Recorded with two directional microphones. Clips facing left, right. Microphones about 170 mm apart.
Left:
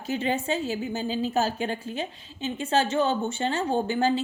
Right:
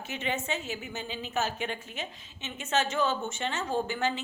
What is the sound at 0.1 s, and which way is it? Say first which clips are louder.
A woman's voice: left 7 dB; 35° left (ahead or behind).